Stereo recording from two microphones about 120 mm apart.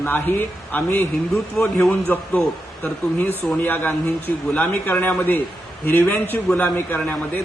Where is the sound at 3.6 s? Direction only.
15° left (ahead or behind).